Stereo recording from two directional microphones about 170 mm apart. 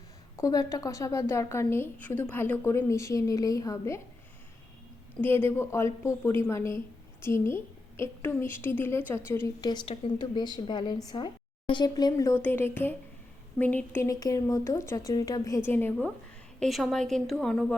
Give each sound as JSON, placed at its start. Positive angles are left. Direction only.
{"t": 0.3, "sound": "a woman's voice", "side_deg": 20}
{"t": 5.2, "sound": "a woman's voice", "side_deg": 10}